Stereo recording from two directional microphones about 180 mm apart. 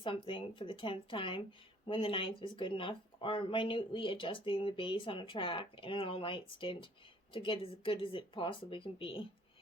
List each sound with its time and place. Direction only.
0.0 s speech: 30° left (ahead or behind)